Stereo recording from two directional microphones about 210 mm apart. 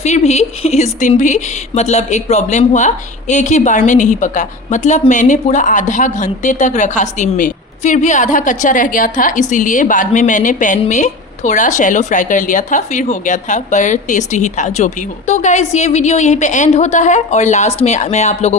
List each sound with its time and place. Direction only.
0.0 s a woman's voice: 30° left (ahead or behind)